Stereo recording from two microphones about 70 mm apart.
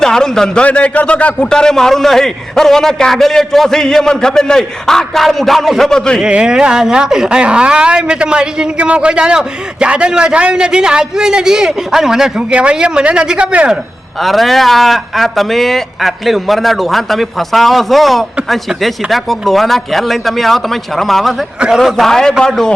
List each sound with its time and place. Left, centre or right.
0.0 s a man's voice: centre
6.2 s speech: centre
14.2 s speech: centre